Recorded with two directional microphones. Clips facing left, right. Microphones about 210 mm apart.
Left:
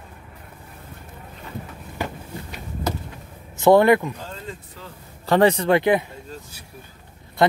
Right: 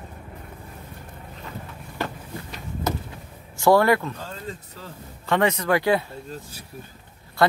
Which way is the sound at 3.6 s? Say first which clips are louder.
Left 3 dB; 20° left (ahead or behind).